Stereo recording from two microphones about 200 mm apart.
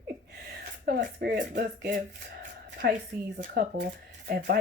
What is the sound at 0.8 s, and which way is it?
Speech, 50° right (ahead or behind).